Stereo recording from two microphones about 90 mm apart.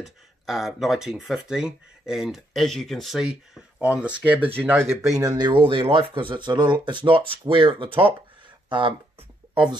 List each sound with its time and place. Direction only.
0.0 s speech: 5° right (ahead or behind)
3.2 s speech: 10° right (ahead or behind); by 4.9 s 25° right (ahead or behind)
5.0 s speech: 40° right (ahead or behind)
5.5 s speech: 80° right